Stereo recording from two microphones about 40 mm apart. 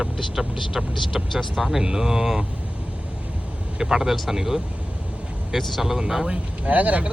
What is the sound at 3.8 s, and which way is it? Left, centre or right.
Speech, centre.